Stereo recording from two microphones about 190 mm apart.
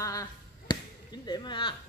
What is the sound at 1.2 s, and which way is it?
Speech, 25° left (ahead or behind).